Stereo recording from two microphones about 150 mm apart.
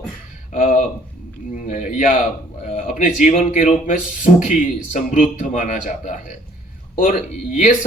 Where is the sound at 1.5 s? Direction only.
60° left (ahead or behind).